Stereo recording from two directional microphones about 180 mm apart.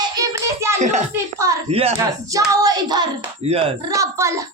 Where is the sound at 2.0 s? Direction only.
20° right (ahead or behind).